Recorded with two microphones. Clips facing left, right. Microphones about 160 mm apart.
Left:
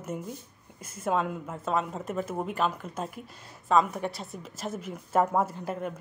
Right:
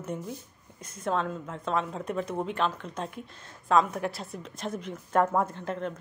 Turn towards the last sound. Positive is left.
turn(degrees=10)  # may be behind; listen again after turning